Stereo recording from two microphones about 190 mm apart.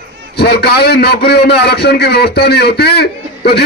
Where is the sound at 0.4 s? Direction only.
60° left (ahead or behind).